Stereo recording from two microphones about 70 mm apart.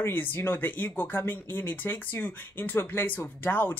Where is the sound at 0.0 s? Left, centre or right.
Left.